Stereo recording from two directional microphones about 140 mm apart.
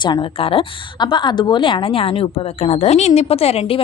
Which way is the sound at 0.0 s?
35° left (ahead or behind).